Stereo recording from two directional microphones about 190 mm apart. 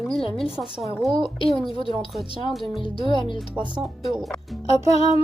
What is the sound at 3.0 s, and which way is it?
Speech, 25° left (ahead or behind).